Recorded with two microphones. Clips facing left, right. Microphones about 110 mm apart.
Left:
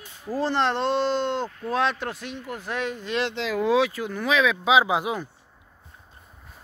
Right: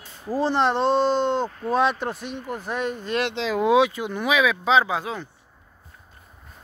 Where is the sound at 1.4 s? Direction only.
45° right (ahead or behind).